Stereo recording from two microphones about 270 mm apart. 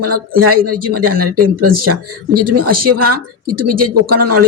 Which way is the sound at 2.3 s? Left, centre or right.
Right.